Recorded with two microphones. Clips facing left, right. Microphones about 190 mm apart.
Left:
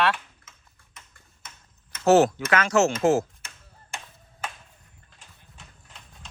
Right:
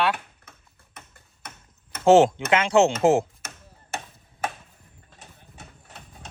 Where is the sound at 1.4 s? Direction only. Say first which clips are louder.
Right 6 dB; 60° right (ahead or behind).